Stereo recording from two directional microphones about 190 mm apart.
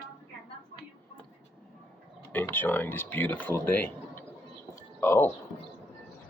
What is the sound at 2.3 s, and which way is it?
Speech, 10° left (ahead or behind).